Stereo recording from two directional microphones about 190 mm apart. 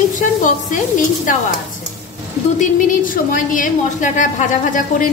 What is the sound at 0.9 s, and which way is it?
Speech, 45° left (ahead or behind).